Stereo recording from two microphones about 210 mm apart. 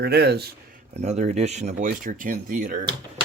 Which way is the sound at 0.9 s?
35° right (ahead or behind).